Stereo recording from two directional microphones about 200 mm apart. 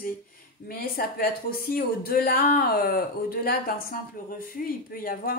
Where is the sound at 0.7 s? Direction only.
50° left (ahead or behind).